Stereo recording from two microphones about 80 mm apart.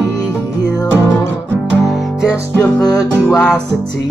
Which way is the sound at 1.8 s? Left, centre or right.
Centre.